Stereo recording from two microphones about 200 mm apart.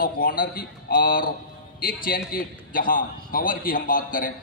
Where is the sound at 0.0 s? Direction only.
45° left (ahead or behind).